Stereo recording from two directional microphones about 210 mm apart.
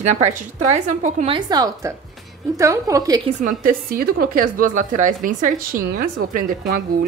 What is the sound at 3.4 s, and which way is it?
A woman's voice, 45° right (ahead or behind).